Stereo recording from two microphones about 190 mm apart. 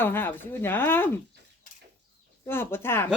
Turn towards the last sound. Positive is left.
turn(degrees=10)  # may be behind; listen again after turning